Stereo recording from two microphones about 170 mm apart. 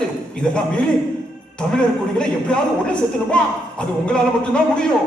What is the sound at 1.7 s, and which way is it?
A man's voice, 5° left (ahead or behind).